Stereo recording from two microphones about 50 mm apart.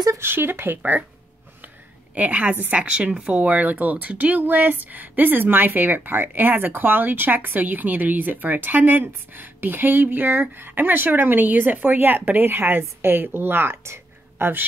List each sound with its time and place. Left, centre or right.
0.2 s speech: right
2.1 s a woman's voice: right
3.3 s speech: right
13.8 s a sound: right